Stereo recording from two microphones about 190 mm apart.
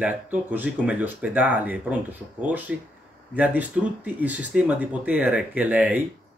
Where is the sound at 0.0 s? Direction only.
10° right (ahead or behind).